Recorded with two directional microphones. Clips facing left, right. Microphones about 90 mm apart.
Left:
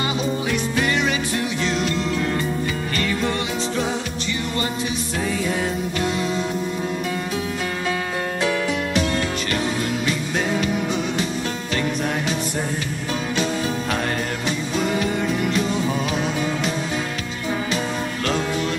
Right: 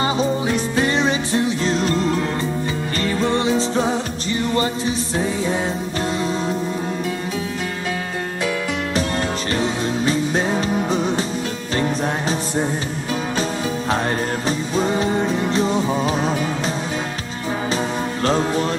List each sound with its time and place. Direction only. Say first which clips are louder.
0.0 s music: right 4 dB; 30° right (ahead or behind)
3.0 s music: right 5 dB; 30° right (ahead or behind)
9.5 s music: right 2 dB; 30° right (ahead or behind)